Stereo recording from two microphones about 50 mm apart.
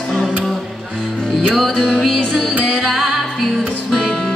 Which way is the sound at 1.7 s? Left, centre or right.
Centre.